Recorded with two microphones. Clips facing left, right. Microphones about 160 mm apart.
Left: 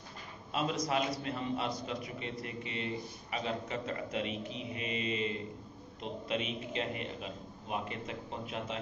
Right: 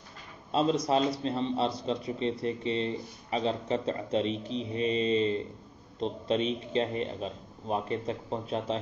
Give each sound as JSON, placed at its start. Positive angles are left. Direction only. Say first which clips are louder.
{"t": 0.5, "sound": "a man's voice", "louder": "right 7 dB", "side_deg": -30}